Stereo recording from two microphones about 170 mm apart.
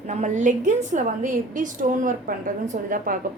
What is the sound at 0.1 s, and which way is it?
A woman's voice, 45° right (ahead or behind).